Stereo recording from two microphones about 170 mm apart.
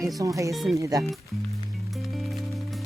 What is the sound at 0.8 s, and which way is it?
Speech, 20° right (ahead or behind).